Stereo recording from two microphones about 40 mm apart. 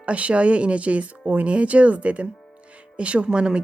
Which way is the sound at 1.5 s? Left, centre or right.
Right.